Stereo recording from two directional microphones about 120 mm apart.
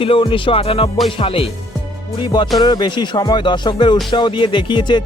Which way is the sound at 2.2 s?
40° left (ahead or behind).